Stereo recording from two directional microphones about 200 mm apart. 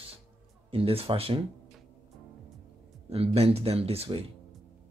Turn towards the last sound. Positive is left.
turn(degrees=-30)  # may be behind; listen again after turning